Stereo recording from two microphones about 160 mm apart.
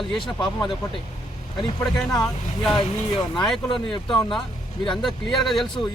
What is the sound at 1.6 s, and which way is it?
Speech, 25° left (ahead or behind).